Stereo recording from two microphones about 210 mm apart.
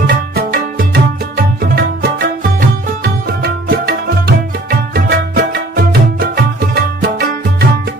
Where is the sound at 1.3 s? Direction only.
45° right (ahead or behind).